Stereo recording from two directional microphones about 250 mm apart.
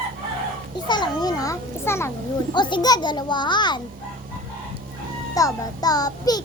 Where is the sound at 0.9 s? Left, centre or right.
Centre.